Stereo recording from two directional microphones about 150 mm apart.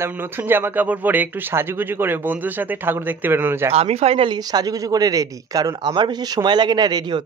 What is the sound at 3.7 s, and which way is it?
Speech, 40° right (ahead or behind).